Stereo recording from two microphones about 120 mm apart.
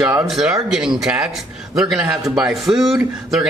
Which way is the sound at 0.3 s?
Centre (ahead or behind).